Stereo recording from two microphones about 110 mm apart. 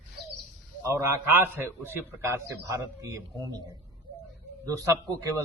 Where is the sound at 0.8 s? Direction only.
25° right (ahead or behind).